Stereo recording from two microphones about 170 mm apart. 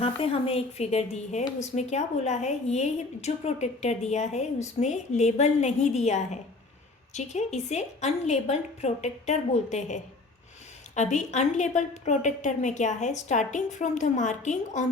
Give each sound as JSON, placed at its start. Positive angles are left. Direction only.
{"t": 0.0, "sound": "a woman's voice", "side_deg": 35}